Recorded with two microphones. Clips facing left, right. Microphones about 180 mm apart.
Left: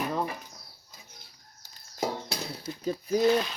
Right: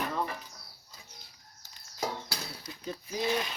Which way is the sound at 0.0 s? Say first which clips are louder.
Left 3 dB; 15° left (ahead or behind).